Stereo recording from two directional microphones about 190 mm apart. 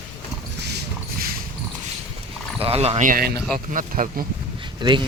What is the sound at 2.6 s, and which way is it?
Speech, 30° right (ahead or behind).